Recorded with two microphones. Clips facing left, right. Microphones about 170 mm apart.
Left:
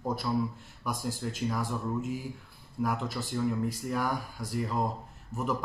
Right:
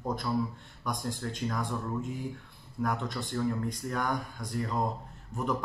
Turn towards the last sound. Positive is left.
turn(degrees=5)  # may be behind; listen again after turning